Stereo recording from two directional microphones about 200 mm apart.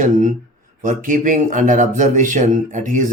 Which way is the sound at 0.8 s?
40° right (ahead or behind).